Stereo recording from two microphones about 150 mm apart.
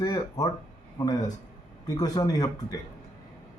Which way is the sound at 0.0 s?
25° left (ahead or behind).